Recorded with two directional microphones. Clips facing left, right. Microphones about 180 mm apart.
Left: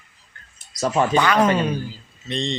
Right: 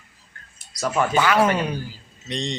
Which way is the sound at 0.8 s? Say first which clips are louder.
Left 2 dB; 30° left (ahead or behind).